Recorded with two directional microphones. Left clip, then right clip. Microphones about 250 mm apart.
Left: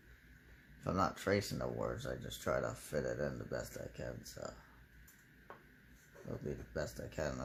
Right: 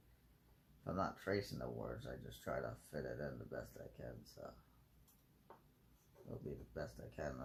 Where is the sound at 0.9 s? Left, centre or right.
Left.